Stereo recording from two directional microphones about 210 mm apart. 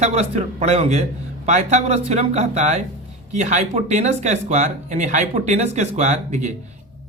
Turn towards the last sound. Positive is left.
turn(degrees=-35)  # may be behind; listen again after turning